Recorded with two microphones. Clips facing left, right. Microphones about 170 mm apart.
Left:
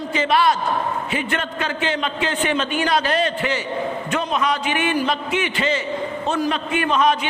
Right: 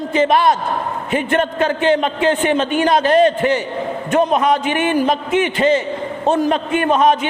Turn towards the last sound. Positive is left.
turn(degrees=-50)  # may be behind; listen again after turning